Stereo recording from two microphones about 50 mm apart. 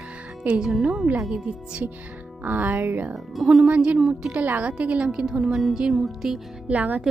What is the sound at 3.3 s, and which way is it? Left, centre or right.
Music, centre.